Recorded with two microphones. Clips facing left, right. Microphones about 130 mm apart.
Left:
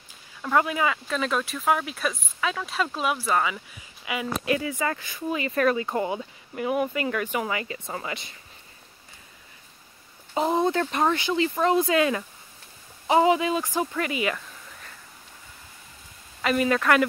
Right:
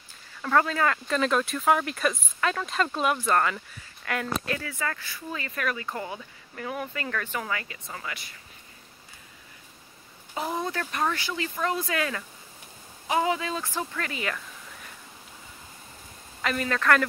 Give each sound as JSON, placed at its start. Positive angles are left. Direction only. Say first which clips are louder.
{"t": 0.4, "sound": "speech", "louder": "even", "side_deg": 10}
{"t": 1.0, "sound": "speech", "louder": "right 2 dB", "side_deg": 0}
{"t": 5.5, "sound": "speech", "louder": "left 9 dB", "side_deg": 35}
{"t": 5.8, "sound": "speech", "louder": "left 7 dB", "side_deg": 20}
{"t": 10.3, "sound": "speech", "louder": "left 7 dB", "side_deg": 25}
{"t": 16.4, "sound": "speech", "louder": "left 3 dB", "side_deg": 10}